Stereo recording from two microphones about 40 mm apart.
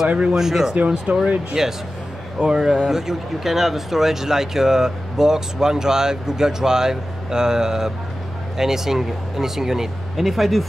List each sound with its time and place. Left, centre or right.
0.4 s speech: centre
1.1 s speech: right
1.5 s speech: centre
2.3 s speech: right
2.6 s speech: centre